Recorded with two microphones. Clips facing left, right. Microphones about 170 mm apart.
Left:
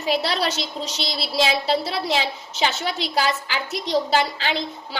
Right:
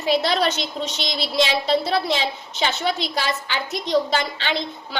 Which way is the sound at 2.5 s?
35° left (ahead or behind).